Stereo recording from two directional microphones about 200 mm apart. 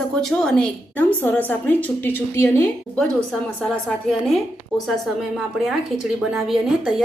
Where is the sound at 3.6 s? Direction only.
Centre (ahead or behind).